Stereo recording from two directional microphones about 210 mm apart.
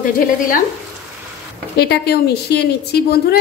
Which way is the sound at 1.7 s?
50° left (ahead or behind).